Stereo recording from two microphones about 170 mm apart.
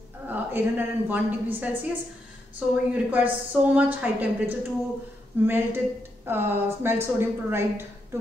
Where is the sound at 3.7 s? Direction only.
10° right (ahead or behind).